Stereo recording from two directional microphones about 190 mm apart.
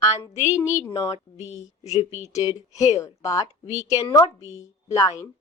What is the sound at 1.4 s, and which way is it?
Speech, 35° left (ahead or behind).